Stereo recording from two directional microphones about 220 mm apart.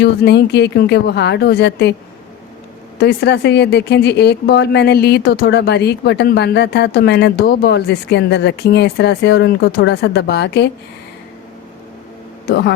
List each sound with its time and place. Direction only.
0.0 s speech: 50° left (ahead or behind)
3.0 s speech: 50° left (ahead or behind)
12.5 s speech: 45° left (ahead or behind)